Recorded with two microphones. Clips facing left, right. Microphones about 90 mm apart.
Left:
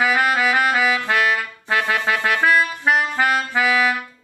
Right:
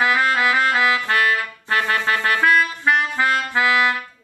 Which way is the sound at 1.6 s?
20° left (ahead or behind).